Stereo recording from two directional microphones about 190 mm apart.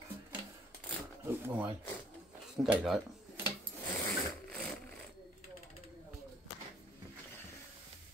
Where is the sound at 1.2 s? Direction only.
10° right (ahead or behind).